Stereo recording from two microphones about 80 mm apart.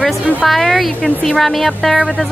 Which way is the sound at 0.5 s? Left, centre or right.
Centre.